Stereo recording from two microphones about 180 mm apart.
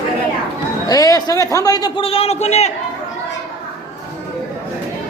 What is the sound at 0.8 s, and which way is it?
A man's voice, 20° left (ahead or behind).